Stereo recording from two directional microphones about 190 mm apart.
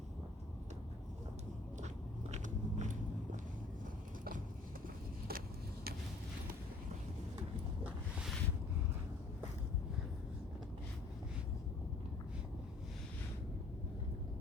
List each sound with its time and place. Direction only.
2.3 s biting: 40° right (ahead or behind)
5.3 s vehicle: 55° right (ahead or behind)
7.9 s a sound: 5° right (ahead or behind)